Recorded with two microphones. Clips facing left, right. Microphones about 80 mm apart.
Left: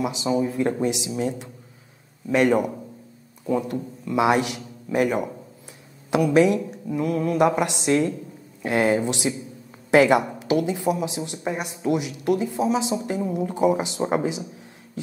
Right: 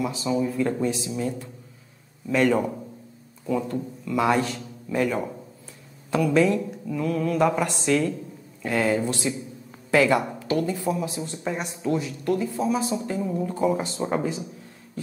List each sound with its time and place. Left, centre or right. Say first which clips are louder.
0.0 s speech: left 2 dB; centre
2.2 s a man's voice: left 2 dB; centre